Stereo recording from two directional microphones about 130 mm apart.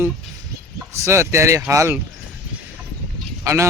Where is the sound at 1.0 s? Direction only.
20° right (ahead or behind).